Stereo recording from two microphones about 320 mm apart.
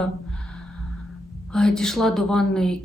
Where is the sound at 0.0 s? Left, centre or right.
Centre.